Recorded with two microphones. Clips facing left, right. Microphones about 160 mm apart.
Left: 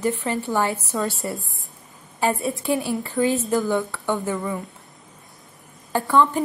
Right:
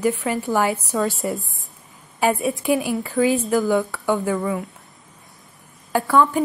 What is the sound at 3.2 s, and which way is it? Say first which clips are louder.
Speech: right 2 dB; centre (ahead or behind).